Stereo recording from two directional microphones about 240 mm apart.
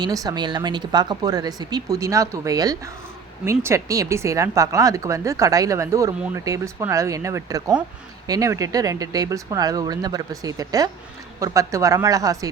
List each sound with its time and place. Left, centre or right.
0.0 s speech: centre